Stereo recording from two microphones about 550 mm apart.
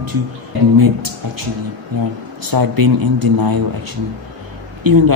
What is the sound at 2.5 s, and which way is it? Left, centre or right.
A man's voice, right.